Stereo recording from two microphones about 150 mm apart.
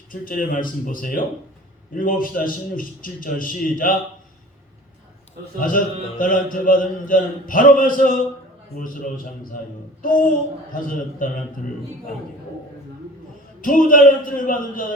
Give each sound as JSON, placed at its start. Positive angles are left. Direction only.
{"t": 0.1, "sound": "music", "side_deg": 65}
{"t": 5.5, "sound": "music", "side_deg": 65}
{"t": 8.7, "sound": "a man's voice", "side_deg": 65}
{"t": 10.0, "sound": "music", "side_deg": 65}
{"t": 13.6, "sound": "music", "side_deg": 65}